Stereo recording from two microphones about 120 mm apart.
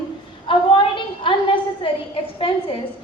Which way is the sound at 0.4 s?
45° left (ahead or behind).